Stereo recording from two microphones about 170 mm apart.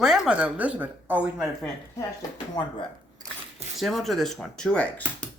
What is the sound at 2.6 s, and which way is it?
Speech, 25° left (ahead or behind).